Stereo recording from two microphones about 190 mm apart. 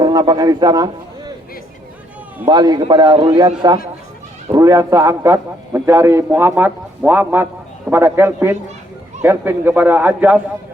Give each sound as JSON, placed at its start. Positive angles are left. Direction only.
{"t": 0.0, "sound": "a man's voice", "side_deg": -20}
{"t": 2.5, "sound": "a man's voice", "side_deg": -20}
{"t": 4.6, "sound": "a man's voice", "side_deg": -15}